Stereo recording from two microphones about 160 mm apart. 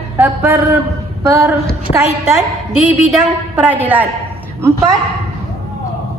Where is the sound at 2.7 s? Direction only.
Centre (ahead or behind).